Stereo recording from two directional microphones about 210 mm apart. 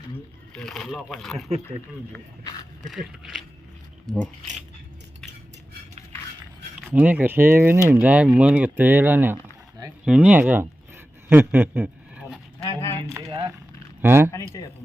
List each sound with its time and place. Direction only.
0.5 s speech: centre (ahead or behind)
1.5 s speech: 30° right (ahead or behind)
2.1 s speech: 20° left (ahead or behind)
2.8 s speech: centre (ahead or behind)
6.9 s speech: 10° right (ahead or behind)
11.3 s a sound: 10° right (ahead or behind)
12.6 s a sound: 15° left (ahead or behind)
13.1 s a sound: 15° right (ahead or behind)
14.0 s speech: 10° right (ahead or behind)